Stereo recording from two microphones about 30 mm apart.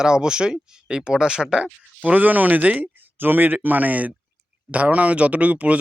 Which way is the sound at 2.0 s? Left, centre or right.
Right.